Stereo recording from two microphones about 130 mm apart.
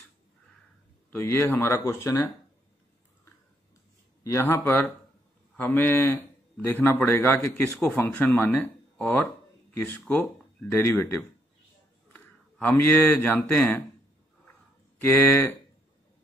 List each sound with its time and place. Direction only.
1.1 s speech: 20° left (ahead or behind)
4.2 s a man's voice: 20° left (ahead or behind)
15.0 s speech: 15° left (ahead or behind)